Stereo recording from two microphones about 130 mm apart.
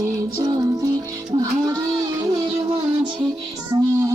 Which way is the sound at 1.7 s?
25° right (ahead or behind).